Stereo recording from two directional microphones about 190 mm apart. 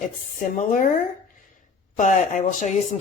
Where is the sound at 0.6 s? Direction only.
40° left (ahead or behind).